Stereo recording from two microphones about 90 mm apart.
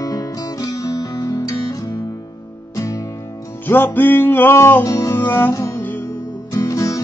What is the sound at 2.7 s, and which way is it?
Music, 40° left (ahead or behind).